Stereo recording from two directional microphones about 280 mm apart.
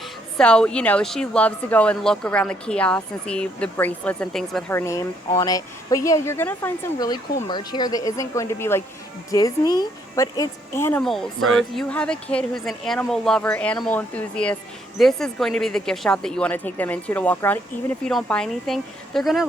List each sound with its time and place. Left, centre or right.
0.3 s a woman's voice: centre
11.3 s speech: right
11.7 s speech: centre